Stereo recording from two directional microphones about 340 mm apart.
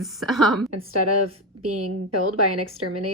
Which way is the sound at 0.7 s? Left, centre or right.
Right.